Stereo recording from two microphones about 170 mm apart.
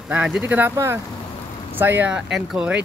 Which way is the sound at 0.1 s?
5° right (ahead or behind).